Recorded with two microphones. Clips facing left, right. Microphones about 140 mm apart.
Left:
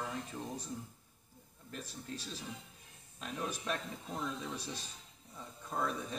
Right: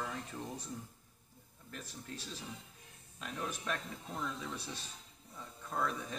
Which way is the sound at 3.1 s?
25° left (ahead or behind).